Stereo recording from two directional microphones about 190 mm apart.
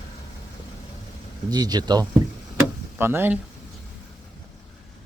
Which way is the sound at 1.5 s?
20° right (ahead or behind).